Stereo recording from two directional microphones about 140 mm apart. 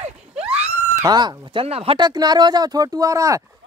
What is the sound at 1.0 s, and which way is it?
Speech, 30° right (ahead or behind).